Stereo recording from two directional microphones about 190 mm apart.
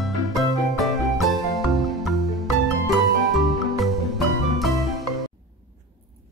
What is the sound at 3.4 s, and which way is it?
Music, centre (ahead or behind).